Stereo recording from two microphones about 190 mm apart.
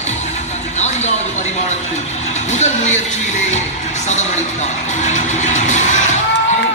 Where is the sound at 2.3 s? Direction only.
40° left (ahead or behind).